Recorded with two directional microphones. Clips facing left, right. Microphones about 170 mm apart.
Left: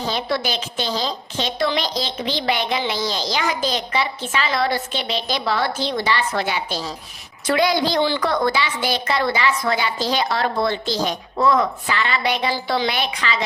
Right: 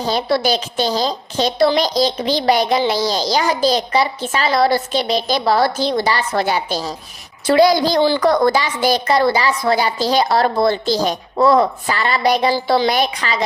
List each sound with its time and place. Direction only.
0.1 s a woman's voice: 35° right (ahead or behind)